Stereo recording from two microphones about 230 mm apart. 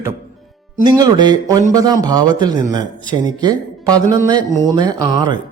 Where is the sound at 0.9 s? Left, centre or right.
Centre.